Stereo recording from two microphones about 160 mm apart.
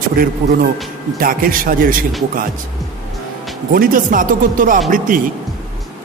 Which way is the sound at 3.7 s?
60° right (ahead or behind).